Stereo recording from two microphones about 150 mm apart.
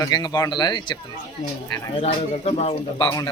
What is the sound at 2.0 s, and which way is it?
Speech, 45° left (ahead or behind).